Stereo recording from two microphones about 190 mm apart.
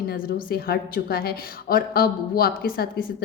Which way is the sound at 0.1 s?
55° left (ahead or behind).